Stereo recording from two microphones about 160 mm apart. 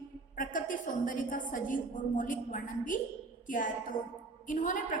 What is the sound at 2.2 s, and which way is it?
A woman's voice, 55° left (ahead or behind).